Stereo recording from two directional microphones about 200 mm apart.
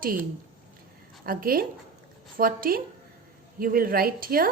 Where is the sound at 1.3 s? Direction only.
45° right (ahead or behind).